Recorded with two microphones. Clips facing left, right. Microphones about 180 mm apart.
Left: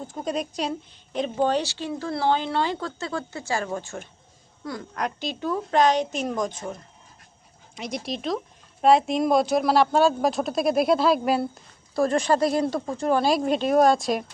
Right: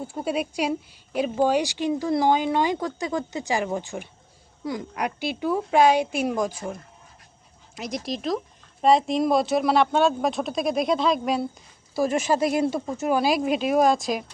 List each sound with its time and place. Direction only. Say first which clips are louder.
0.1 s a woman's voice: right 1 dB; 10° right (ahead or behind)
7.8 s speech: right 1 dB; centre (ahead or behind)